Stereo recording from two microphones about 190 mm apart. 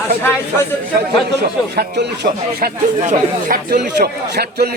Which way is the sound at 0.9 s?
55° right (ahead or behind).